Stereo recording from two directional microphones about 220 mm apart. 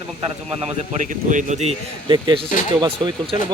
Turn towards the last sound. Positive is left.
turn(degrees=-20)  # may be behind; listen again after turning